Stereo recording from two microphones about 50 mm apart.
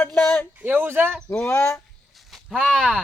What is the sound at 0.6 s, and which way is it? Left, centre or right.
Speech, right.